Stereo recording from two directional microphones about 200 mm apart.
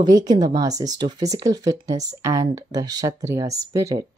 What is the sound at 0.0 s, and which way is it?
Speech, 20° right (ahead or behind).